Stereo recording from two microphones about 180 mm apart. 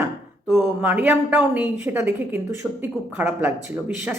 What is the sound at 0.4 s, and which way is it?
Speech, 5° right (ahead or behind).